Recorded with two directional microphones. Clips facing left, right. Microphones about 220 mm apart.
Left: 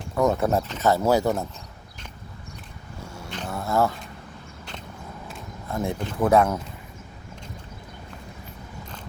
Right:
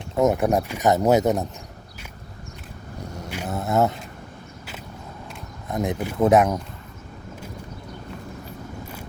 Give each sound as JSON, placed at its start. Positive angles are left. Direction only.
{"t": 0.2, "sound": "speech", "side_deg": -15}
{"t": 3.0, "sound": "vehicle", "side_deg": -15}
{"t": 3.5, "sound": "a sound", "side_deg": -20}
{"t": 5.6, "sound": "speech", "side_deg": -20}